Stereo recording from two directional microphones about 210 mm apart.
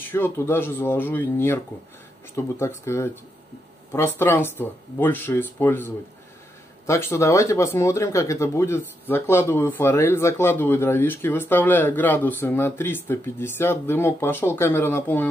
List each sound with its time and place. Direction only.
0.1 s speech: 10° left (ahead or behind)